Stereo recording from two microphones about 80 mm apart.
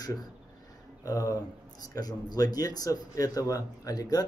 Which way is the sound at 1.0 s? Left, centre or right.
Left.